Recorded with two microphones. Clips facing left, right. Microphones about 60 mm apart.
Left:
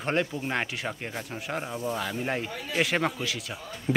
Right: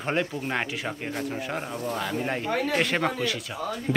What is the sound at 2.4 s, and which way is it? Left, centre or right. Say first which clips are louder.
Speech: right 6 dB; right.